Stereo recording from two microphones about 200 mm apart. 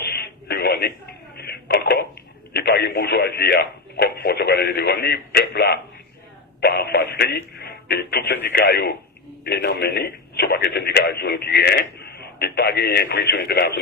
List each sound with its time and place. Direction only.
0.0 s radio: 55° left (ahead or behind)
1.4 s a sound: 55° left (ahead or behind)
2.5 s speech: 55° left (ahead or behind)